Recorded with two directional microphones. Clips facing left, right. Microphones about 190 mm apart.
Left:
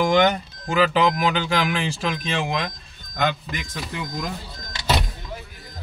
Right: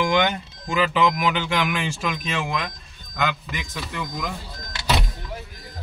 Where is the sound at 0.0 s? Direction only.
40° left (ahead or behind).